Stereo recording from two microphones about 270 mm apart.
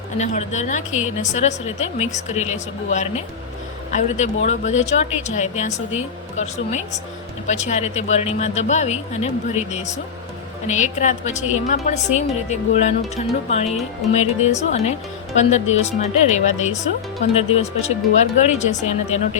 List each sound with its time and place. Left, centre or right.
0.2 s a woman's voice: left
0.9 s a woman's voice: centre
1.2 s a woman's voice: left
4.4 s a woman's voice: left
10.7 s a woman's voice: left